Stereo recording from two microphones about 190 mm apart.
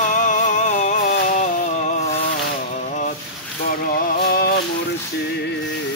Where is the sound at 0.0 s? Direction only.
40° left (ahead or behind).